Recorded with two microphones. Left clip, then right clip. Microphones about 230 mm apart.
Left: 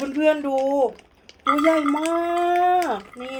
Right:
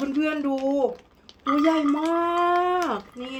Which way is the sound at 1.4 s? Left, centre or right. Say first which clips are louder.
Left 3 dB; left.